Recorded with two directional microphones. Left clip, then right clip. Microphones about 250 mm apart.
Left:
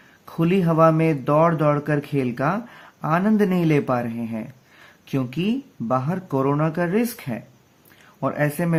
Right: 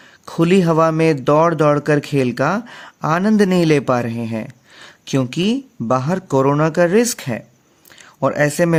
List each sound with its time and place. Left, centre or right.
0.3 s speech: right